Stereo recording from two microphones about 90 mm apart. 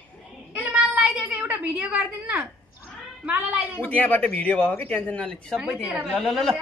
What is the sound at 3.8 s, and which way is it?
Speech, 20° left (ahead or behind).